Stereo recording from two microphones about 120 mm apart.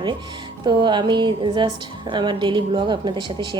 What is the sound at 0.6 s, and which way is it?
A woman's voice, 40° right (ahead or behind).